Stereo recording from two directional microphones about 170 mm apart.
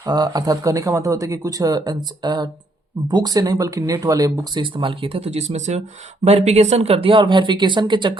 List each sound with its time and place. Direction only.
0.0 s speech: 25° right (ahead or behind)